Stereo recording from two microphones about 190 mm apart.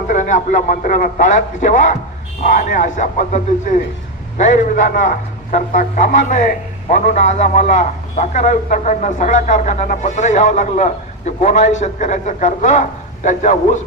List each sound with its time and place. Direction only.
0.1 s a man's voice: 40° left (ahead or behind)
5.0 s a man's voice: 40° left (ahead or behind)